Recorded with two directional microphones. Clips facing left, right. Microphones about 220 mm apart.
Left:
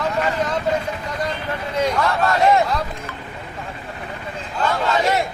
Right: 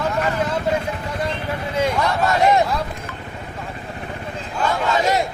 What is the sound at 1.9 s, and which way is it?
Speech, 15° right (ahead or behind).